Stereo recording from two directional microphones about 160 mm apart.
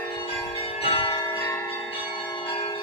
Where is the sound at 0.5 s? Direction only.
35° left (ahead or behind).